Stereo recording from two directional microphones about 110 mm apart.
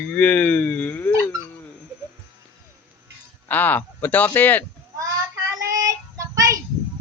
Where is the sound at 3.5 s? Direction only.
15° left (ahead or behind).